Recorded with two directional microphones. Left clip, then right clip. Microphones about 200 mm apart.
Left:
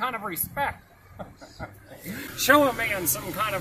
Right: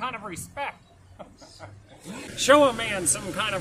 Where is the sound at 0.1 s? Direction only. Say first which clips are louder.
Left 4 dB; 40° left (ahead or behind).